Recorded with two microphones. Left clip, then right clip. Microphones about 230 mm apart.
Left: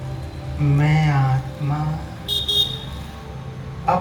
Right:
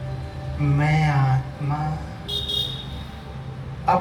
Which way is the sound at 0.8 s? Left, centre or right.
Right.